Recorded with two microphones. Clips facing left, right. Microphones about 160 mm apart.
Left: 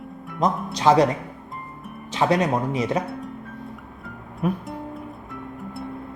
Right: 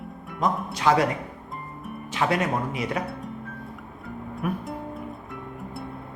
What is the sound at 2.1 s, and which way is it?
Speech, 20° left (ahead or behind).